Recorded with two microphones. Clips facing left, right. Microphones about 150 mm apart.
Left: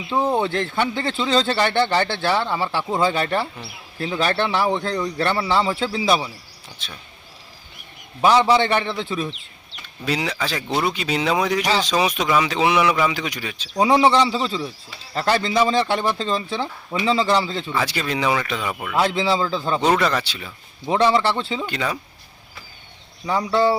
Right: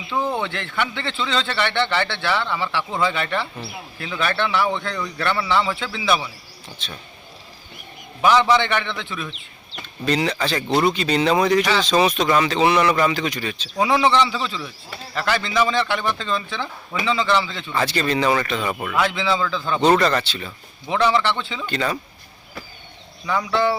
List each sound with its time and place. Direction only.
0.1 s a man's voice: 35° left (ahead or behind)
6.8 s speech: 10° left (ahead or behind)
8.2 s a man's voice: 30° left (ahead or behind)
10.1 s speech: 5° left (ahead or behind)
13.7 s a man's voice: 35° left (ahead or behind)
17.7 s speech: 5° left (ahead or behind)
18.9 s a man's voice: 40° left (ahead or behind)
19.8 s speech: 5° left (ahead or behind)
20.8 s a man's voice: 35° left (ahead or behind)
21.7 s speech: 5° left (ahead or behind)
23.2 s a man's voice: 35° left (ahead or behind)